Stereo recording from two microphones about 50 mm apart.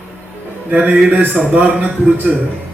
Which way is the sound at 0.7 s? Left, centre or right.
Right.